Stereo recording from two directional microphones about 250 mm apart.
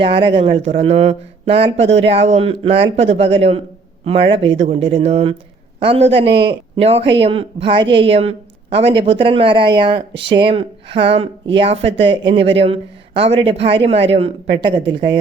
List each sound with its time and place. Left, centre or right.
0.0 s speech: right